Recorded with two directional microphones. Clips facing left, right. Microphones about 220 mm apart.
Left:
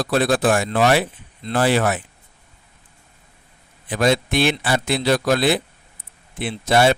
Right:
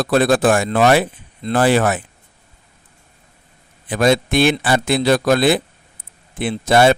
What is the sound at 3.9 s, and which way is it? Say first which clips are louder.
A man's voice: right 3 dB; 50° right (ahead or behind).